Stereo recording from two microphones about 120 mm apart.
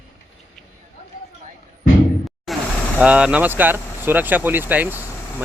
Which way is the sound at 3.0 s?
10° right (ahead or behind).